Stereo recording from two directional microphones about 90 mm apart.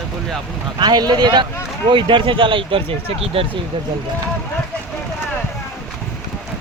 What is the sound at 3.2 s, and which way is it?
Speech, 90° right.